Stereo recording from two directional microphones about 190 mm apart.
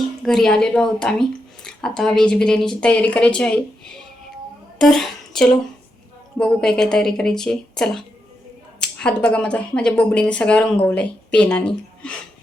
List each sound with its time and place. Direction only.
0.2 s speech: centre (ahead or behind)
9.0 s speech: 5° left (ahead or behind)